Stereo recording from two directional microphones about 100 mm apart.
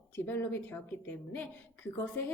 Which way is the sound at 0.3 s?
20° left (ahead or behind).